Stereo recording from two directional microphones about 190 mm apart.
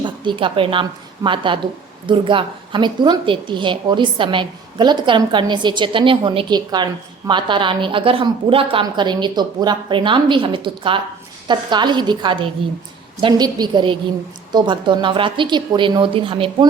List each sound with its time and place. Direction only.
0.0 s a woman's voice: 25° right (ahead or behind)